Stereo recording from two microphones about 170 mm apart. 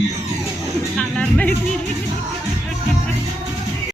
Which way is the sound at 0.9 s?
5° left (ahead or behind).